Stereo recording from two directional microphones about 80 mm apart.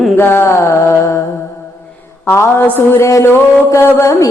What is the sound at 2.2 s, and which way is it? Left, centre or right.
Music, left.